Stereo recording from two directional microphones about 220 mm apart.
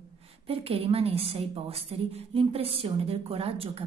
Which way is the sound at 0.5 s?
25° right (ahead or behind).